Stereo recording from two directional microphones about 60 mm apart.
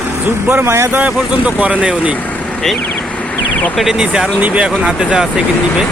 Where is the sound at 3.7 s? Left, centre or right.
Centre.